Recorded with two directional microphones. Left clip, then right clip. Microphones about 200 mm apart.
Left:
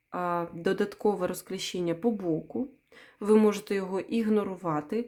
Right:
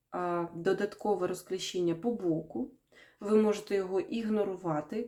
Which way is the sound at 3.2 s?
45° left (ahead or behind).